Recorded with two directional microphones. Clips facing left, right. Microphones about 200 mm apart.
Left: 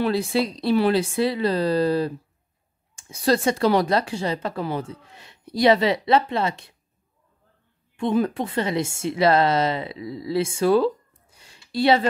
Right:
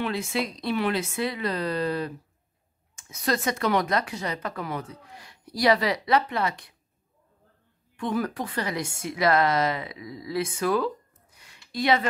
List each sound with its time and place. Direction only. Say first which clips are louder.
0.0 s speech: left 6 dB; 35° left (ahead or behind)
7.9 s a woman's voice: left 6 dB; 25° left (ahead or behind)